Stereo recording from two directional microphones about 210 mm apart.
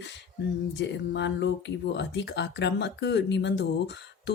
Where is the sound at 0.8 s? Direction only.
55° left (ahead or behind).